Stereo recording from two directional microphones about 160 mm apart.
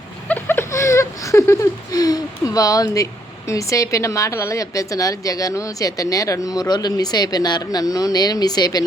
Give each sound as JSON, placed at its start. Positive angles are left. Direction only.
{"t": 0.3, "sound": "speech", "side_deg": 10}